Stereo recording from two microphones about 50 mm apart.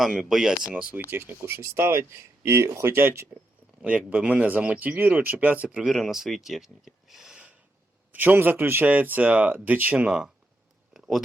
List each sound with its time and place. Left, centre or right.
0.0 s speech: centre
0.7 s speech: right
1.1 s speech: right
1.4 s speech: right
2.8 s speech: right
3.8 s speech: right
5.8 s speech: centre
8.1 s speech: right
10.1 s speech: centre
10.9 s a sound: centre